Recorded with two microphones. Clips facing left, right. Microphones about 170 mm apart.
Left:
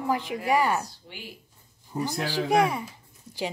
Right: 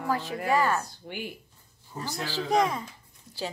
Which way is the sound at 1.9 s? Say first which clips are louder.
Left 5 dB; 15° left (ahead or behind).